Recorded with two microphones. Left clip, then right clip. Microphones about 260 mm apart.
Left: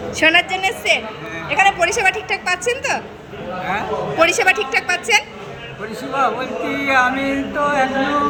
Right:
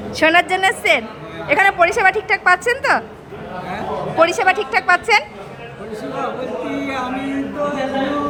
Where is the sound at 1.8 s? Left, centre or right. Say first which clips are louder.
Right 3 dB; centre.